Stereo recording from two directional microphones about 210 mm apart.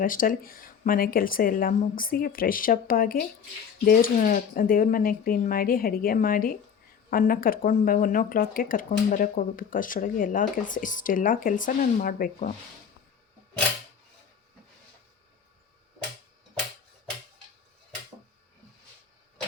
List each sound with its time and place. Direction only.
0.0 s speech: 40° left (ahead or behind)